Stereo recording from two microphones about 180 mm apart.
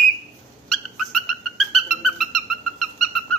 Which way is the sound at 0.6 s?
Centre (ahead or behind).